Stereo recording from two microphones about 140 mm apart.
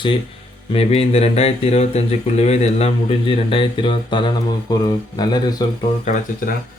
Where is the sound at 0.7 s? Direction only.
45° left (ahead or behind); by 5.6 s 30° left (ahead or behind).